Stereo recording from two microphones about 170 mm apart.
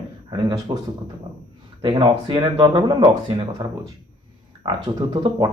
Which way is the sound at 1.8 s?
30° right (ahead or behind).